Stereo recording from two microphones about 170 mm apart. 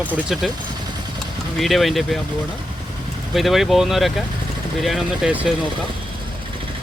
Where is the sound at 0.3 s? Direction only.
Centre (ahead or behind).